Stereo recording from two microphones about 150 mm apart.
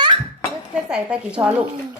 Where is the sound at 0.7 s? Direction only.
5° right (ahead or behind).